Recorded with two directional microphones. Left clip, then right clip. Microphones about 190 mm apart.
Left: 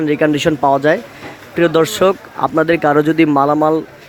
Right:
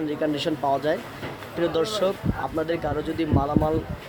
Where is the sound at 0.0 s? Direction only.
35° left (ahead or behind).